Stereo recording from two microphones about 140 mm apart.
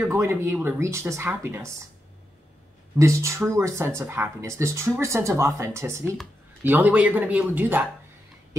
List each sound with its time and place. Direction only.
0.0 s speech: 20° right (ahead or behind)
3.0 s speech: 20° right (ahead or behind)